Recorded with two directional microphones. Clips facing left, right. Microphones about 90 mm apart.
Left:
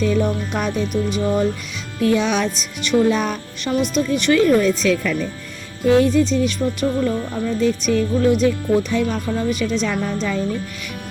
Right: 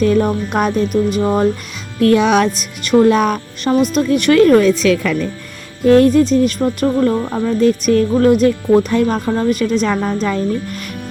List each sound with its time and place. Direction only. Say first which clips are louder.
0.0 s speech: right 5 dB; 55° right (ahead or behind)
2.0 s speech: right 6 dB; 60° right (ahead or behind)
5.8 s speech: right 5 dB; 55° right (ahead or behind)